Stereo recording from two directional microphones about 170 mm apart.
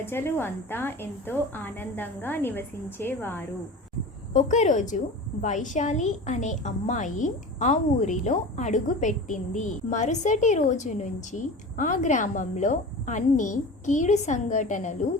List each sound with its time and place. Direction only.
0.0 s a woman's voice: 15° left (ahead or behind)
4.4 s a woman's voice: 45° left (ahead or behind)